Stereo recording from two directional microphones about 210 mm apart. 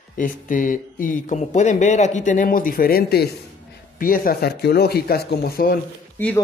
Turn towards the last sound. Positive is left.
turn(degrees=10)  # may be behind; listen again after turning